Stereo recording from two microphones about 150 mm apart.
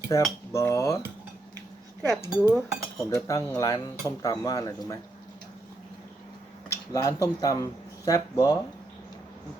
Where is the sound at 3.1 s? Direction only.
20° left (ahead or behind).